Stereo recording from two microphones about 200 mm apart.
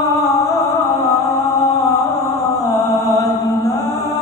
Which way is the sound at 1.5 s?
15° left (ahead or behind).